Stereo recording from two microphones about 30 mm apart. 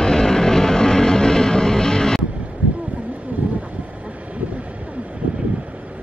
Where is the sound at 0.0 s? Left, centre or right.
Left.